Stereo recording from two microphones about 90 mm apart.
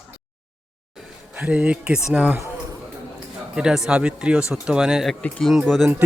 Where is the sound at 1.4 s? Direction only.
15° right (ahead or behind).